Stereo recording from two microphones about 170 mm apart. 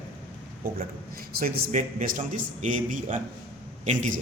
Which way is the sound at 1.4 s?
50° right (ahead or behind).